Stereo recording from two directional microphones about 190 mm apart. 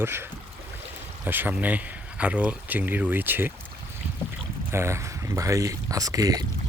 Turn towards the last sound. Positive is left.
turn(degrees=-20)  # may be behind; listen again after turning